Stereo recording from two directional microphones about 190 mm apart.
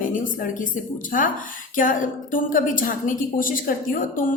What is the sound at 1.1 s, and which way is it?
A woman's voice, 45° left (ahead or behind).